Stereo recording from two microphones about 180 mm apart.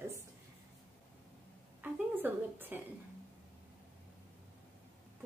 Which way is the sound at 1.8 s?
10° right (ahead or behind).